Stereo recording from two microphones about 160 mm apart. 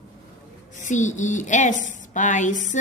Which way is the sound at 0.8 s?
50° left (ahead or behind).